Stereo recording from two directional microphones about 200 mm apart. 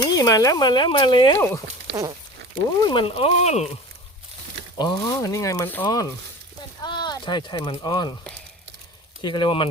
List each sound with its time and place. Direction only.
0.0 s speech: 20° left (ahead or behind)
1.4 s speech: 15° left (ahead or behind)
1.9 s a sound: 60° right (ahead or behind)
2.8 s speech: 25° left (ahead or behind)
4.8 s speech: 15° left (ahead or behind)
9.2 s speech: 25° left (ahead or behind)